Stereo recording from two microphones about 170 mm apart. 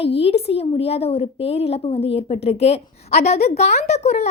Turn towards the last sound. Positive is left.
turn(degrees=40)  # may be behind; listen again after turning